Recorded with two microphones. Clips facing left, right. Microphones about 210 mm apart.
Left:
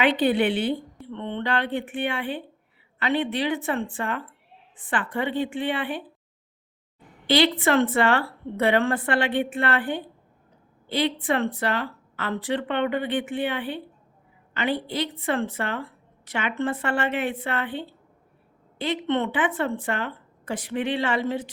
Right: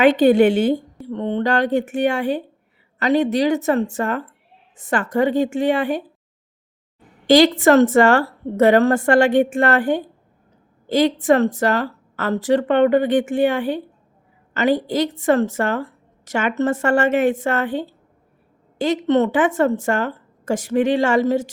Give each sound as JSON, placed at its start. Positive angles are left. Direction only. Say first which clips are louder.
{"t": 0.0, "sound": "a woman's voice", "louder": "right 8 dB", "side_deg": -45}
{"t": 7.3, "sound": "a woman's voice", "louder": "right 8 dB", "side_deg": -45}